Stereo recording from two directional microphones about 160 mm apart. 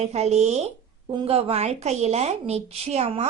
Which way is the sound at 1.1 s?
35° right (ahead or behind).